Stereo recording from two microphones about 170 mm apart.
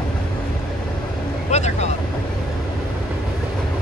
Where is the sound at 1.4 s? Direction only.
40° left (ahead or behind).